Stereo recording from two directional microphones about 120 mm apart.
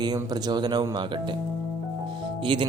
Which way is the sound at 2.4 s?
45° right (ahead or behind).